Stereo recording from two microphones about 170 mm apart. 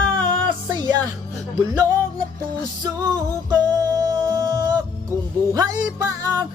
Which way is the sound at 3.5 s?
20° right (ahead or behind).